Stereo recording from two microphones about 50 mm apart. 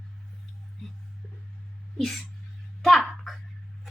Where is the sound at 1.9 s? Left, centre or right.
Centre.